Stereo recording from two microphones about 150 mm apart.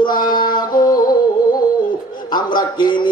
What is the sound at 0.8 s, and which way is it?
Music, 25° left (ahead or behind).